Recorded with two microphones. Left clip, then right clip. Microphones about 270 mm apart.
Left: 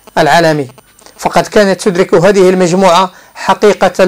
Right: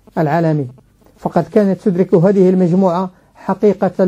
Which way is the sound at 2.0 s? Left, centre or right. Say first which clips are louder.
Left 5 dB; left.